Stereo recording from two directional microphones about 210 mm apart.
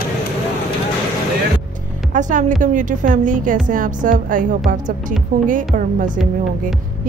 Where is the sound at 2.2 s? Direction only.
35° right (ahead or behind).